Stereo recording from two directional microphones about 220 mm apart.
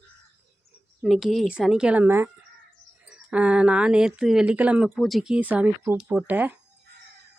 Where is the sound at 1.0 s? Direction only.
Centre (ahead or behind).